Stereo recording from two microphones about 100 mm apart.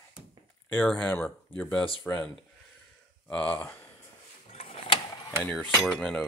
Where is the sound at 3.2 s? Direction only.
10° left (ahead or behind).